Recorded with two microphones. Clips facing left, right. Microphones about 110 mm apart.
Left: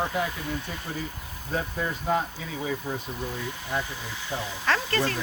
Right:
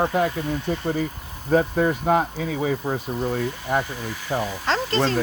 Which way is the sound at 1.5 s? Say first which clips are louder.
Right 11 dB; 75° right (ahead or behind).